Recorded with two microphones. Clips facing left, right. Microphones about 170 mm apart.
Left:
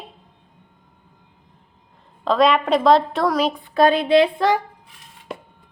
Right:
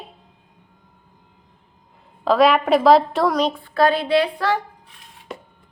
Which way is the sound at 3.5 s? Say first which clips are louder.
Left 2 dB; 20° left (ahead or behind).